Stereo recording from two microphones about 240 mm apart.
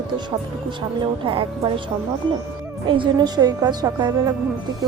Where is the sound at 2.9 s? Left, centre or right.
Centre.